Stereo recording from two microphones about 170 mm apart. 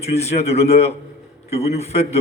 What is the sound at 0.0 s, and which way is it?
Speech, 40° left (ahead or behind).